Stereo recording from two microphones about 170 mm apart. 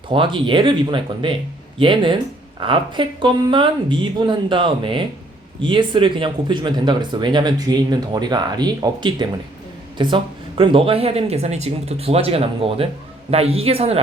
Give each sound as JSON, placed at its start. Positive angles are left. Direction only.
{"t": 0.1, "sound": "speech", "side_deg": -30}